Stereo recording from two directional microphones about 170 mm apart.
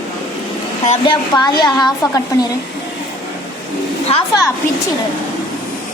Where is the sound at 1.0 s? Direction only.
25° left (ahead or behind).